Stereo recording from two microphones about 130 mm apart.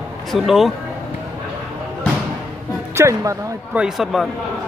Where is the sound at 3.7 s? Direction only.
5° right (ahead or behind).